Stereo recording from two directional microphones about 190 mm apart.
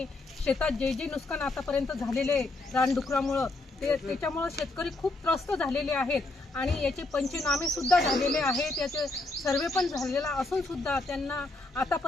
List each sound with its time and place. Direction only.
0.0 s speech: 5° left (ahead or behind)
9.0 s speech: 15° left (ahead or behind)
9.6 s speech: centre (ahead or behind)